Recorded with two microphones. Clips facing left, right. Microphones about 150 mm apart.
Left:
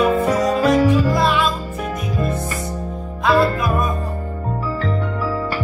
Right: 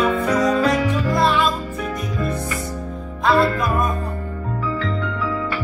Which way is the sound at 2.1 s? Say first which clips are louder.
Left 3 dB; 25° left (ahead or behind).